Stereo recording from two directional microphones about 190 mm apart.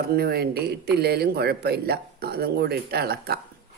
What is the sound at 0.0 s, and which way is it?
A man's voice, 55° right (ahead or behind).